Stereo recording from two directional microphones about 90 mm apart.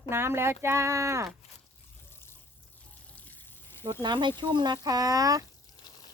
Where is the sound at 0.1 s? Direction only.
30° right (ahead or behind).